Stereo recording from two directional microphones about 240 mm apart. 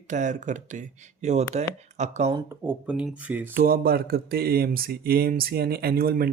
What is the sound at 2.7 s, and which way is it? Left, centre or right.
Speech, centre.